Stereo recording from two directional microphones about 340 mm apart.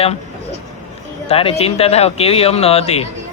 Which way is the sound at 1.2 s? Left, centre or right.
Centre.